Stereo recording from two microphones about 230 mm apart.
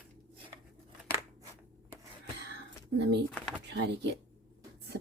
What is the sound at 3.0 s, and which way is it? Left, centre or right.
Speech, right.